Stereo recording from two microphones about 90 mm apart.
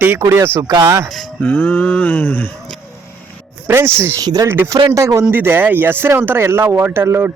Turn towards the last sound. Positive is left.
turn(degrees=-25)  # may be behind; listen again after turning